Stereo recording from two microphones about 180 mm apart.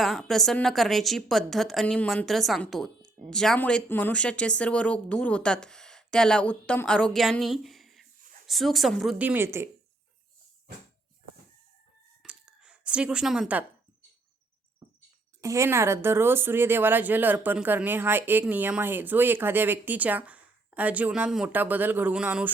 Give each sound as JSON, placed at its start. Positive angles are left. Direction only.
{"t": 0.0, "sound": "a woman's voice", "side_deg": 0}
{"t": 12.2, "sound": "a sound", "side_deg": -5}
{"t": 15.4, "sound": "speech", "side_deg": -15}